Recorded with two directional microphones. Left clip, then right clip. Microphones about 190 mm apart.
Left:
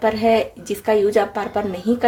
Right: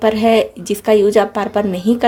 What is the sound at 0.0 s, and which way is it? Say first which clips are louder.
Speech: right 4 dB; 50° right (ahead or behind).